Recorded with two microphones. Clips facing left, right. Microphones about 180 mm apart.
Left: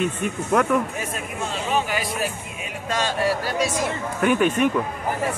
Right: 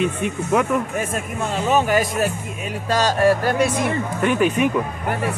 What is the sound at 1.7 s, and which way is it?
Speech, 45° right (ahead or behind).